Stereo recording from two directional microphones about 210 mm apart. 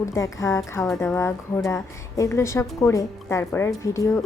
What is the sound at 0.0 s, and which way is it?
A woman's voice, 15° left (ahead or behind).